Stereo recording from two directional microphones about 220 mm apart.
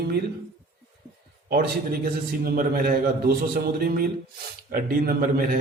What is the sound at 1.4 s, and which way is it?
A man's voice, 45° right (ahead or behind).